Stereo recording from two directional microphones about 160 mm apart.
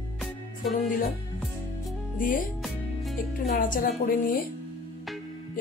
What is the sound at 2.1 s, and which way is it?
Speech, 55° left (ahead or behind).